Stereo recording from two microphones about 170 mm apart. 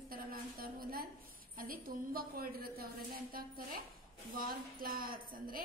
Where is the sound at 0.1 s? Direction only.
60° right (ahead or behind).